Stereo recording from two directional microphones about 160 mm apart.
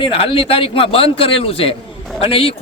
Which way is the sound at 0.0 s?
35° left (ahead or behind).